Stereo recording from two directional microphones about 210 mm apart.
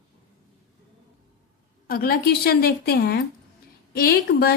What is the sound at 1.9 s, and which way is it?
A woman's voice, 45° left (ahead or behind).